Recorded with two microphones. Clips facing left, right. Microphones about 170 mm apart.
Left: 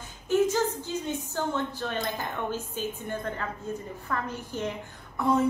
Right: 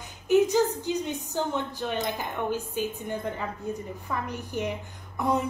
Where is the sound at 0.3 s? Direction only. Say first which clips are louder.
Right 3 dB; 15° right (ahead or behind).